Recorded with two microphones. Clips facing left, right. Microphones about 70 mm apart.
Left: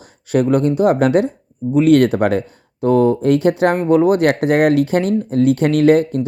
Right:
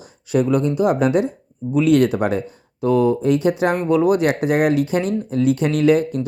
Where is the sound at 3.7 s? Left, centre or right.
Left.